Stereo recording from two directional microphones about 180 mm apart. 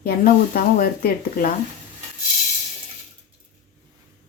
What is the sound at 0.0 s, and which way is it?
Speech, 55° left (ahead or behind).